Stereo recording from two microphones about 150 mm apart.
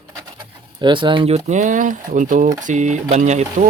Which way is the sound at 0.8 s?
30° right (ahead or behind).